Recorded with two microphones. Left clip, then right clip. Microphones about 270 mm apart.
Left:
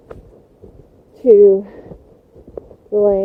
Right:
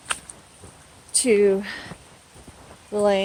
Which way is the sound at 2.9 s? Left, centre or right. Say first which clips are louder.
Left 6 dB; right.